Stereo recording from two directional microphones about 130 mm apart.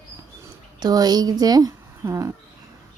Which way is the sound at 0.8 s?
30° right (ahead or behind).